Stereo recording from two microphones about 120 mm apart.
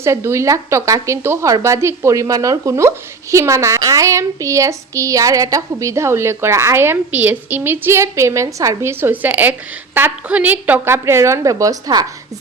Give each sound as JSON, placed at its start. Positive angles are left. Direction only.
{"t": 0.0, "sound": "speech", "side_deg": -25}